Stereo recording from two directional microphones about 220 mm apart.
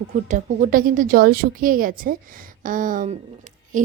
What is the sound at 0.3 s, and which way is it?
A woman's voice, 35° right (ahead or behind).